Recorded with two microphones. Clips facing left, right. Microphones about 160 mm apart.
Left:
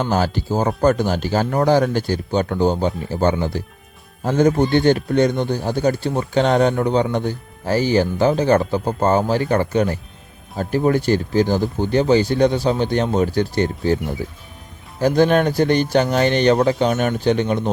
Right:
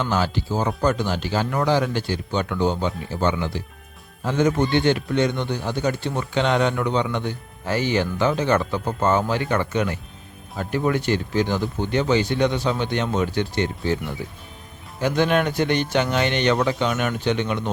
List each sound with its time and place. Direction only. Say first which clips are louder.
0.0 s a man's voice: left 3 dB; 45° left (ahead or behind)